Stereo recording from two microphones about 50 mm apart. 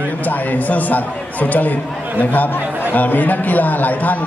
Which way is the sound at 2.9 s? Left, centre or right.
Left.